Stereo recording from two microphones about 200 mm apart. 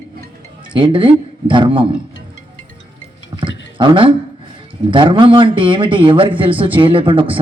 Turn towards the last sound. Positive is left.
turn(degrees=-25)  # may be behind; listen again after turning